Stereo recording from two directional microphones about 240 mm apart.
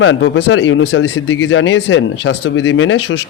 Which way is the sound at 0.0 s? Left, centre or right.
Left.